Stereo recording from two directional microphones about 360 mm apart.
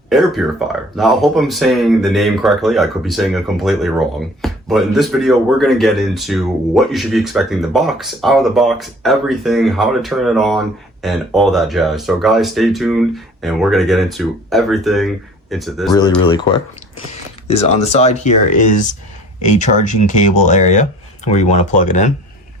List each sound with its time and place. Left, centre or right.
0.1 s speech: centre
15.9 s speech: centre